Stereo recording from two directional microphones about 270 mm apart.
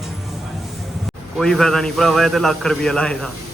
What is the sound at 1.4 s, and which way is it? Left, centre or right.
A man's voice, centre.